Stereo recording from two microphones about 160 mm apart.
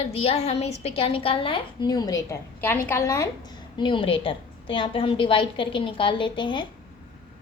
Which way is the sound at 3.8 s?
30° left (ahead or behind).